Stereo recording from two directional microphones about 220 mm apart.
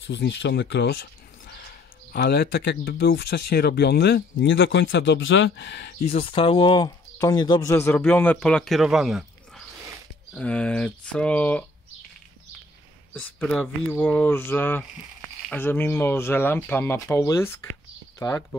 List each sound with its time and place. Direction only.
0.0 s speech: 55° left (ahead or behind)
2.1 s speech: 45° left (ahead or behind)
6.1 s speech: 25° left (ahead or behind); by 9.2 s centre (ahead or behind)
10.3 s speech: 5° left (ahead or behind)
13.1 s speech: 5° left (ahead or behind)